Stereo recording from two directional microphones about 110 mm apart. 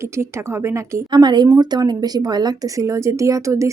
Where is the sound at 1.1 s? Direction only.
40° right (ahead or behind).